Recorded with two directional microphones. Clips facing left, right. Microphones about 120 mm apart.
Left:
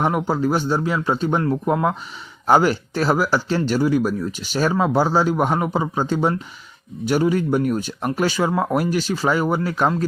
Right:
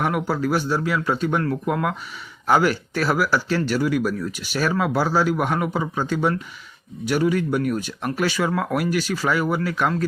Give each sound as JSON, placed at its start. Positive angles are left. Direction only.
{"t": 0.0, "sound": "speech", "side_deg": 30}